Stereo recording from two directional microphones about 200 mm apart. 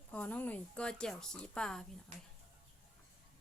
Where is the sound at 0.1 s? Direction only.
10° left (ahead or behind).